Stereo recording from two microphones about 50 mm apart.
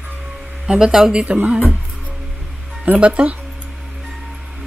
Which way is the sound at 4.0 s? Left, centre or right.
Centre.